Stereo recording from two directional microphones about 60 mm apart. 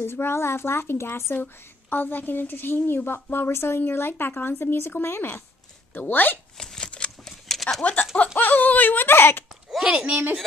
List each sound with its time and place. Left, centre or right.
0.0 s speech: left
1.3 s a woman's voice: left
6.6 s a sound: centre
7.8 s speech: left
8.4 s a sound: left
9.8 s a woman's voice: centre